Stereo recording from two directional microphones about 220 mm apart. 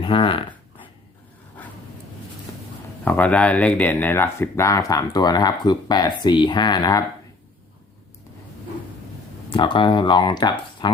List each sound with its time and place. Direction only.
0.0 s speech: 25° left (ahead or behind)
3.0 s speech: 5° left (ahead or behind)
9.5 s speech: 20° left (ahead or behind)